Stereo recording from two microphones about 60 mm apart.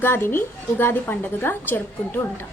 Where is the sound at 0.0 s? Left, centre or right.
Left.